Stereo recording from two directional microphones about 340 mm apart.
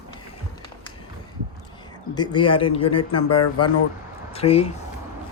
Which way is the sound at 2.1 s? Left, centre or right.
Centre.